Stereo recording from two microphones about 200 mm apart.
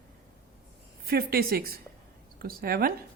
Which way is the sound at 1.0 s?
50° right (ahead or behind).